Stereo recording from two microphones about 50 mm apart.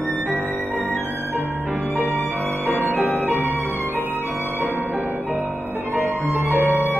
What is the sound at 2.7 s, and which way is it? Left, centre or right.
Music, right.